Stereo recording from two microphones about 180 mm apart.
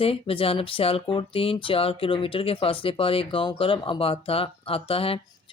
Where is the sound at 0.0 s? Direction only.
30° left (ahead or behind).